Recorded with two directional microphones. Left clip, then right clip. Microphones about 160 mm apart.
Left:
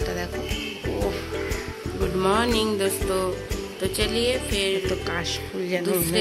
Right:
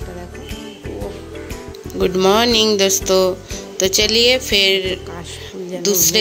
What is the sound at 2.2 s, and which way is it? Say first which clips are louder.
Music: right 8 dB; 40° right (ahead or behind).